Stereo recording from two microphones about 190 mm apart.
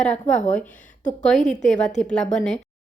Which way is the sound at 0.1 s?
40° left (ahead or behind).